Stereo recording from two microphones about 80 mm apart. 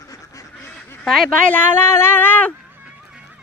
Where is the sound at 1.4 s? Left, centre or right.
Left.